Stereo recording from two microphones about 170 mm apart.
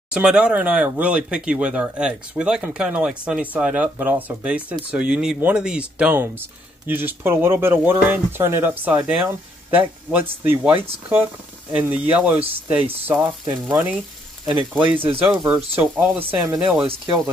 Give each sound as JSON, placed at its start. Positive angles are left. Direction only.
{"t": 0.1, "sound": "speech", "side_deg": -5}
{"t": 14.4, "sound": "speech", "side_deg": -30}
{"t": 15.0, "sound": "speech", "side_deg": -10}
{"t": 16.8, "sound": "speech", "side_deg": -30}